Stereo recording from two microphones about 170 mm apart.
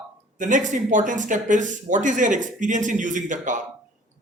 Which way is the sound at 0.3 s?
50° right (ahead or behind).